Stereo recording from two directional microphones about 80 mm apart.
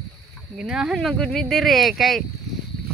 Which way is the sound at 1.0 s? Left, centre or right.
Centre.